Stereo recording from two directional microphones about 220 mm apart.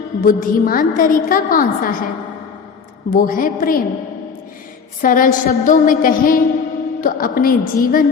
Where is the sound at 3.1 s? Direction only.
40° left (ahead or behind).